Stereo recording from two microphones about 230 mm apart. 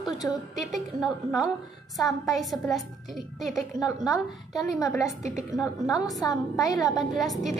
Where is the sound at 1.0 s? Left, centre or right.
Centre.